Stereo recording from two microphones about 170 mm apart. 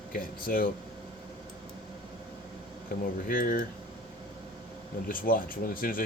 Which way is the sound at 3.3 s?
55° left (ahead or behind).